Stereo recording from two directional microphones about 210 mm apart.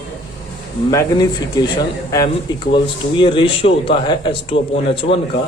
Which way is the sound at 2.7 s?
25° left (ahead or behind).